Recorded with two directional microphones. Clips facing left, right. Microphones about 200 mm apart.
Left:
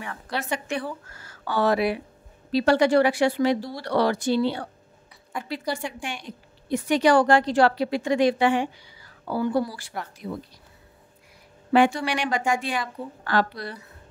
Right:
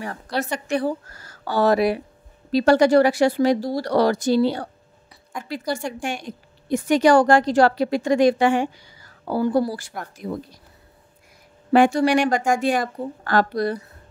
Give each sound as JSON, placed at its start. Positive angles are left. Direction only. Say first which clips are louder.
{"t": 0.0, "sound": "speech", "louder": "right 5 dB", "side_deg": -40}
{"t": 5.3, "sound": "speech", "louder": "even", "side_deg": 0}
{"t": 5.9, "sound": "a woman's voice", "louder": "right 6 dB", "side_deg": -45}
{"t": 11.7, "sound": "a woman's voice", "louder": "right 5 dB", "side_deg": -45}